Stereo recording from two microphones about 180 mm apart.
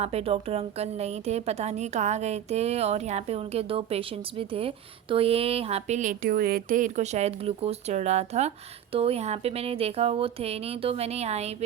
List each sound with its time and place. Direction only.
0.0 s a woman's voice: 35° right (ahead or behind)